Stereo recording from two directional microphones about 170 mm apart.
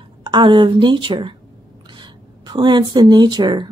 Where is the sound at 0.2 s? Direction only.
25° right (ahead or behind).